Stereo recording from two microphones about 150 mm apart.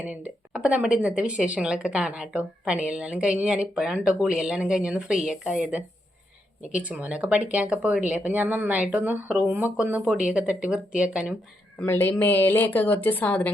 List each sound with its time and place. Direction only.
0.5 s speech: 5° right (ahead or behind)
11.8 s a woman's voice: 15° left (ahead or behind)